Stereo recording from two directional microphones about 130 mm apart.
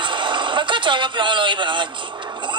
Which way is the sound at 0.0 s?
40° right (ahead or behind).